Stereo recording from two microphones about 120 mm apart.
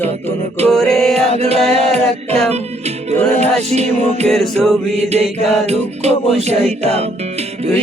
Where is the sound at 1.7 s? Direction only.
60° right (ahead or behind).